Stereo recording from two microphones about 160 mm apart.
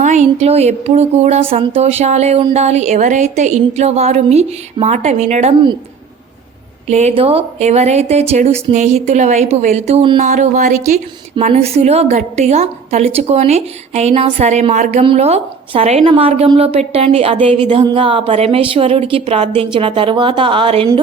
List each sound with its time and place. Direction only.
0.0 s speech: 45° right (ahead or behind)
6.8 s speech: 45° right (ahead or behind)
11.3 s a woman's voice: 40° right (ahead or behind)